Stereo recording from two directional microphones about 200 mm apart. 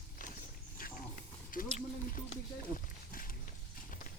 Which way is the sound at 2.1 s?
45° left (ahead or behind).